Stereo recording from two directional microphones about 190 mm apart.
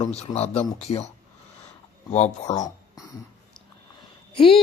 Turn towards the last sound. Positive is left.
turn(degrees=30)  # may be behind; listen again after turning